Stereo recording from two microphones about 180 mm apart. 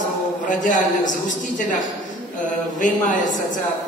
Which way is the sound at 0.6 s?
45° left (ahead or behind).